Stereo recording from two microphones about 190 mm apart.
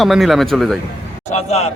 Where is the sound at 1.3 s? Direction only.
35° left (ahead or behind).